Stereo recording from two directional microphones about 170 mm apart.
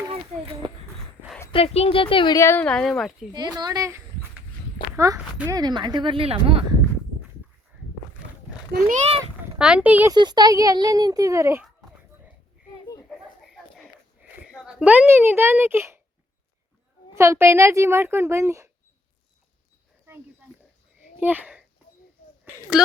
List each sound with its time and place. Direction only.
0.1 s a sound: 35° right (ahead or behind)
1.5 s speech: 35° left (ahead or behind); by 2.6 s 15° left (ahead or behind)
2.6 s speech: 5° left (ahead or behind)
3.3 s speech: 25° right (ahead or behind)
5.0 s speech: 20° right (ahead or behind)
9.6 s a child's voice: 5° right (ahead or behind)
10.1 s speech: 25° right (ahead or behind)
13.1 s a sound: centre (ahead or behind)
17.2 s a child's voice: 15° right (ahead or behind)
21.2 s a child's voice: 10° right (ahead or behind)
22.7 s speech: 5° right (ahead or behind)